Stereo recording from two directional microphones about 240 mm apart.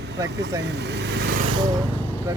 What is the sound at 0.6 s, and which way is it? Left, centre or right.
Speech, right.